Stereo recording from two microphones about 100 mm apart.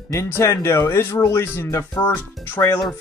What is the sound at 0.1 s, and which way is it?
Speech, 30° left (ahead or behind).